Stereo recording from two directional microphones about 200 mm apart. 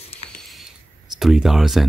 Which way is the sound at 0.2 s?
30° left (ahead or behind).